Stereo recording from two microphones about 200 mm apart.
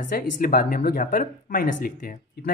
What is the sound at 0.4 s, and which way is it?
Speech, 45° left (ahead or behind).